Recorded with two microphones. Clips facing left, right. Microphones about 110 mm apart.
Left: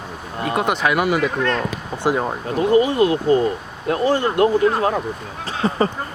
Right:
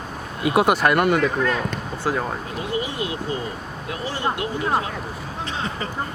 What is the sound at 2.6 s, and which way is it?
Speech, 45° left (ahead or behind).